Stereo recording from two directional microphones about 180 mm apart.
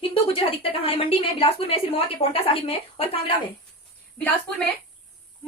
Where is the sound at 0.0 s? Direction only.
30° left (ahead or behind).